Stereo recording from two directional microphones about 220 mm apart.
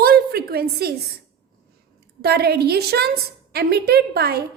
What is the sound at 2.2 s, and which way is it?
A woman's voice, 45° right (ahead or behind).